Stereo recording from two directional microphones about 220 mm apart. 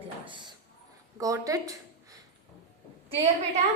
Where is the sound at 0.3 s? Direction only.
20° right (ahead or behind).